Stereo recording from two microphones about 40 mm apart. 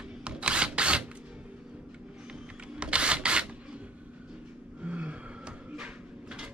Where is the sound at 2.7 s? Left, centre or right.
Right.